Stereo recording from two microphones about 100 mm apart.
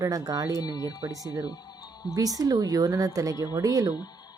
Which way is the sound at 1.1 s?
35° right (ahead or behind).